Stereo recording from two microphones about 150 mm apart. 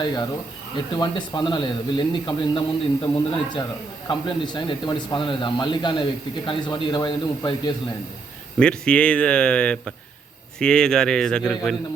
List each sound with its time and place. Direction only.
0.0 s speech: 30° left (ahead or behind)
4.1 s speech: 30° left (ahead or behind)
8.5 s speech: 5° left (ahead or behind)